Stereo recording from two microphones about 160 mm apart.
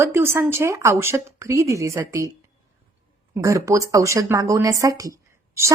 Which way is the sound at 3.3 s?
20° right (ahead or behind).